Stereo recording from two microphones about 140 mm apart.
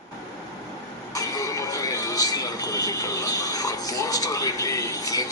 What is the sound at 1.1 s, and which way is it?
Speech, 25° left (ahead or behind).